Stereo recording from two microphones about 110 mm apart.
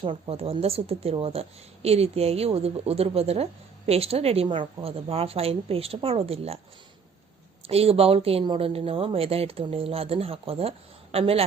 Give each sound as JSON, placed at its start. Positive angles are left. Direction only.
{"t": 0.0, "sound": "speech", "side_deg": -60}
{"t": 4.4, "sound": "speech", "side_deg": -50}
{"t": 7.7, "sound": "speech", "side_deg": -65}